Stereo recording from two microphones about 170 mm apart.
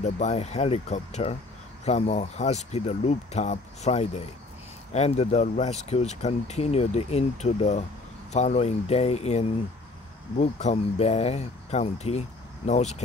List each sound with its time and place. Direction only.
0.0 s speech: 40° left (ahead or behind)